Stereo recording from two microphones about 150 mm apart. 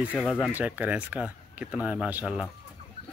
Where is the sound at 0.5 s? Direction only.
10° right (ahead or behind).